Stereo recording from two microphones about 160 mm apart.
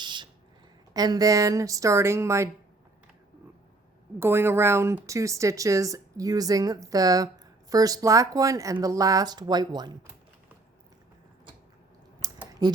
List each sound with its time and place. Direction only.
0.0 s a sound: 30° right (ahead or behind)
0.9 s speech: 25° right (ahead or behind)
4.2 s speech: 15° right (ahead or behind)
12.2 s typing: 25° right (ahead or behind)
12.6 s speech: 25° right (ahead or behind)